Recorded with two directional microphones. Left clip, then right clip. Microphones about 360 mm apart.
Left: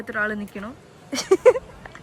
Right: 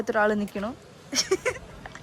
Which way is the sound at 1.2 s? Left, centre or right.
Centre.